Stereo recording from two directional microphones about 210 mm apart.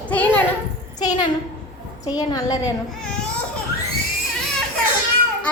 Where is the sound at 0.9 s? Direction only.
20° left (ahead or behind).